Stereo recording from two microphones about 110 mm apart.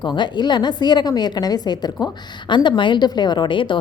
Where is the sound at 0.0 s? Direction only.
45° left (ahead or behind).